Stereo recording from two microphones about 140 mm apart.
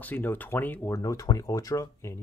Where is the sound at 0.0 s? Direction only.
15° left (ahead or behind).